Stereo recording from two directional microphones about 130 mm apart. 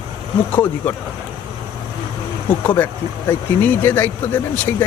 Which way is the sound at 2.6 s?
15° left (ahead or behind).